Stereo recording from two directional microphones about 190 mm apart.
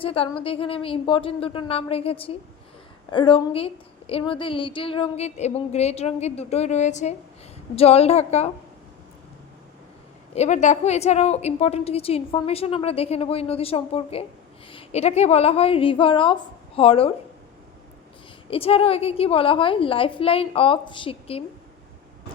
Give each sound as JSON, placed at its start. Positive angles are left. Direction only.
{"t": 0.0, "sound": "a woman's voice", "side_deg": 30}
{"t": 10.3, "sound": "a woman's voice", "side_deg": 40}
{"t": 18.5, "sound": "a woman's voice", "side_deg": 30}